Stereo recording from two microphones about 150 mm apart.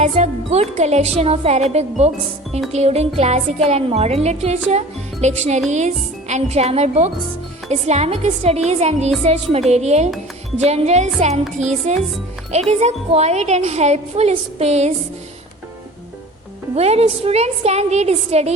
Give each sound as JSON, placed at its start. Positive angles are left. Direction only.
{"t": 0.0, "sound": "a woman's voice", "side_deg": -45}
{"t": 16.7, "sound": "a woman's voice", "side_deg": -45}